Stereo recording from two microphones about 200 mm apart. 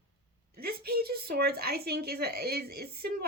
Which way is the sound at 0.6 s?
50° right (ahead or behind).